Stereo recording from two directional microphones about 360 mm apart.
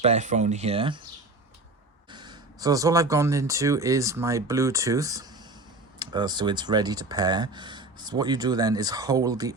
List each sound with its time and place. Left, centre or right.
0.0 s speech: centre
2.0 s speech: centre